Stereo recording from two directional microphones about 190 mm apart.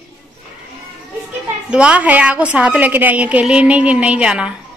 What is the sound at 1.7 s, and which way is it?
A woman's voice, 5° right (ahead or behind).